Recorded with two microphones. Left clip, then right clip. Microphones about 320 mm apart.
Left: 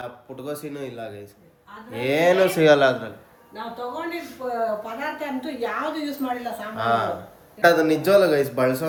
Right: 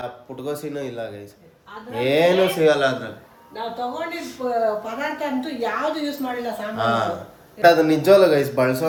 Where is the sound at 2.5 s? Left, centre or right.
Left.